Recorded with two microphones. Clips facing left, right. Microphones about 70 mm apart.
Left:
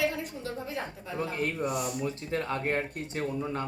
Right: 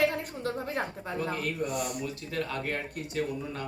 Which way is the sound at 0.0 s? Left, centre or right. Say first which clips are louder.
Right 3 dB; right.